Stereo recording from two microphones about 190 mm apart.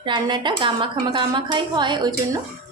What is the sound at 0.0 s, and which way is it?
A woman's voice, 25° right (ahead or behind).